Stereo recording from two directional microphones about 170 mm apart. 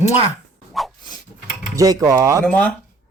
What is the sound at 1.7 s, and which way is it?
Speech, 20° right (ahead or behind).